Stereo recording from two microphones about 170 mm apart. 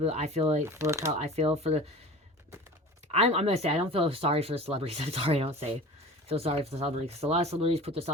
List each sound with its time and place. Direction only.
0.0 s speech: 40° right (ahead or behind)
0.6 s speech: 15° right (ahead or behind)
1.2 s speech: 35° right (ahead or behind)
3.1 s speech: 40° right (ahead or behind)